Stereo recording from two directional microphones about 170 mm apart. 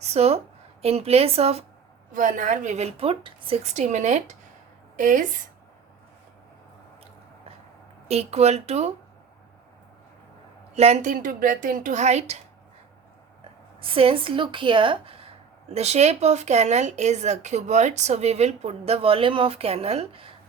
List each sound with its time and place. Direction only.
0.0 s a woman's voice: 40° right (ahead or behind)
2.1 s a woman's voice: 50° right (ahead or behind)
8.0 s speech: 40° right (ahead or behind)
10.8 s a woman's voice: 40° right (ahead or behind)
13.8 s speech: 35° right (ahead or behind)